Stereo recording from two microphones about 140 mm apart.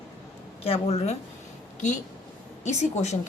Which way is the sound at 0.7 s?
45° left (ahead or behind).